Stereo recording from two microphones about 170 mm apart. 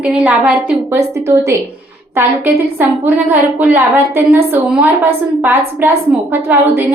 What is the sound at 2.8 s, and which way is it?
A woman's voice, 10° right (ahead or behind).